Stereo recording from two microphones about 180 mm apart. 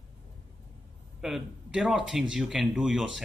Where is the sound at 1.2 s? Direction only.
Centre (ahead or behind).